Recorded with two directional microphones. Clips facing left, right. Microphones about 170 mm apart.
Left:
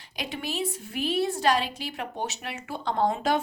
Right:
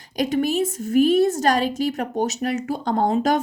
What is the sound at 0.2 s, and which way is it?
A woman's voice, 45° right (ahead or behind).